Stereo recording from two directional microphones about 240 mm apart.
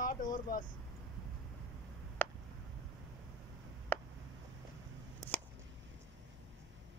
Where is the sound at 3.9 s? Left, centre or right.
Centre.